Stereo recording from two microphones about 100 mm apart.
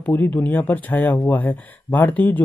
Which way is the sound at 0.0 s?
20° left (ahead or behind).